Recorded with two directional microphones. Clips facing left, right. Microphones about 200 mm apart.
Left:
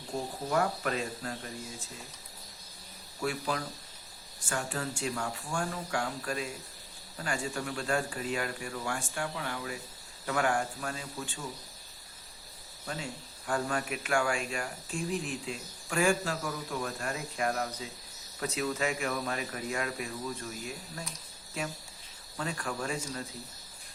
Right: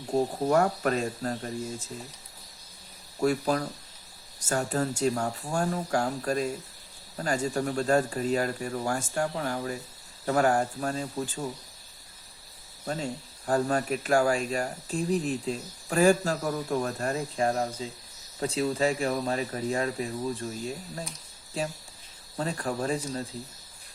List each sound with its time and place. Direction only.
0.1 s speech: 45° right (ahead or behind)
3.2 s speech: 40° right (ahead or behind)
12.8 s speech: 35° right (ahead or behind)